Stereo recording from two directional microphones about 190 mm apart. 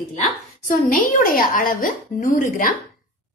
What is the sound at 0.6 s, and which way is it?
A woman's voice, 45° left (ahead or behind).